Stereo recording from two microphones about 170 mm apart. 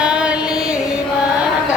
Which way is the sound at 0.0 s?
5° right (ahead or behind).